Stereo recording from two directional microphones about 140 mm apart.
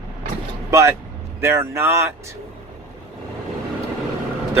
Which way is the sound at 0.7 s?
20° right (ahead or behind).